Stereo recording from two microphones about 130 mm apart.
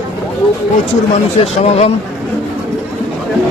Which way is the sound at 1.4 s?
55° left (ahead or behind).